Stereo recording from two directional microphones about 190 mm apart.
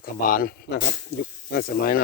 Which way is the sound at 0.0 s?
50° left (ahead or behind).